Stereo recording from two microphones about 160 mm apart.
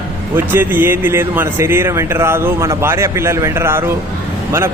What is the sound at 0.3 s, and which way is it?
A man's voice, 15° right (ahead or behind).